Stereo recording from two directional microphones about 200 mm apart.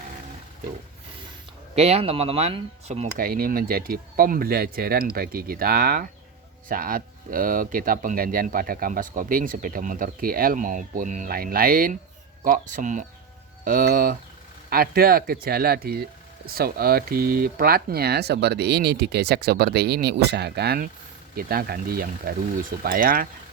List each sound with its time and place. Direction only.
1.7 s speech: 30° right (ahead or behind)
3.2 s speech: 45° right (ahead or behind)